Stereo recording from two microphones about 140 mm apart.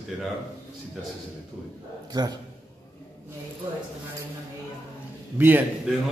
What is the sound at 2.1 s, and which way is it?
Speech, 30° right (ahead or behind).